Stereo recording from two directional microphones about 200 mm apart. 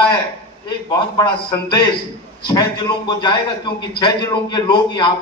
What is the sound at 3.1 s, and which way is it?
A man's voice, 20° left (ahead or behind).